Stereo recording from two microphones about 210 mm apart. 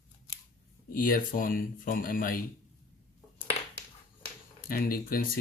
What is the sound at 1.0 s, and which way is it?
Speech, 40° left (ahead or behind).